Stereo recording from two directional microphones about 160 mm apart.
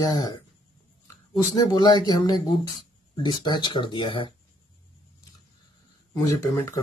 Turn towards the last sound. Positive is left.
turn(degrees=15)  # may be behind; listen again after turning